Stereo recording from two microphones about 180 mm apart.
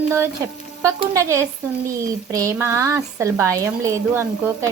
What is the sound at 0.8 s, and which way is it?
Speech, 15° right (ahead or behind).